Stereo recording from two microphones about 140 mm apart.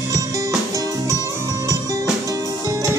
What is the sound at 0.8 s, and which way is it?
Music, 25° right (ahead or behind).